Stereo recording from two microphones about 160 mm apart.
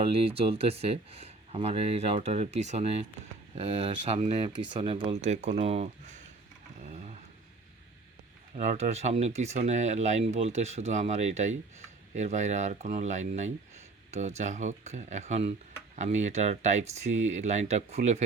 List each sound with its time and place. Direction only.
0.1 s speech: 35° right (ahead or behind)
6.8 s a sound: 45° right (ahead or behind)
8.5 s speech: 45° right (ahead or behind)